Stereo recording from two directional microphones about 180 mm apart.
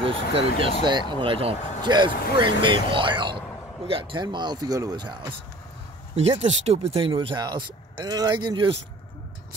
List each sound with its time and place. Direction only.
0.0 s speech: 30° right (ahead or behind)
6.1 s speech: 35° right (ahead or behind)